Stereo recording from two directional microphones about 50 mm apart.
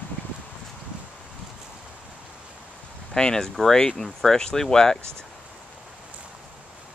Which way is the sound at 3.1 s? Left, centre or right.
Centre.